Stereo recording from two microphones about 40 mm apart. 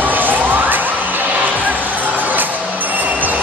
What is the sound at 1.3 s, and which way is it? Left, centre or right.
Music, right.